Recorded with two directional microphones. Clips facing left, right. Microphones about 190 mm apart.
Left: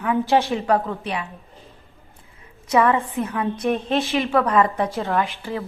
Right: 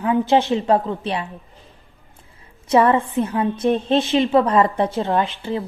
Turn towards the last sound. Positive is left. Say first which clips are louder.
# right 3 dB
turn(degrees=-25)  # may be behind; listen again after turning